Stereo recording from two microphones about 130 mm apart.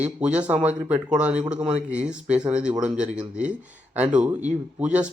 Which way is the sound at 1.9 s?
10° right (ahead or behind).